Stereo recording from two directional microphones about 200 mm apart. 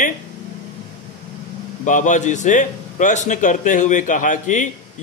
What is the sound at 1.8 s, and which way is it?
A man's voice, 40° left (ahead or behind).